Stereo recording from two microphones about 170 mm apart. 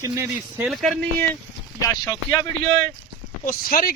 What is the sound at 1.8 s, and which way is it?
Speech, 20° left (ahead or behind).